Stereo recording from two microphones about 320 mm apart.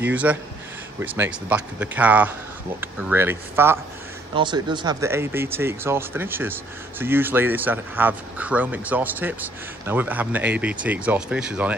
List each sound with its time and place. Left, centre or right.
0.0 s speech: centre